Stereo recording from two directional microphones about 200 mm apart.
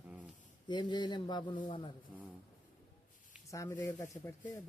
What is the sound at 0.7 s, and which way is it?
Speech, 20° left (ahead or behind).